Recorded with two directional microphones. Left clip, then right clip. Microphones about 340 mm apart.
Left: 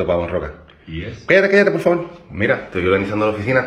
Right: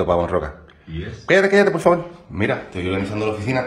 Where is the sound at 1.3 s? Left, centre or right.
Centre.